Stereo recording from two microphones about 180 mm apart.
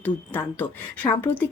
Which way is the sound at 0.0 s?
10° left (ahead or behind).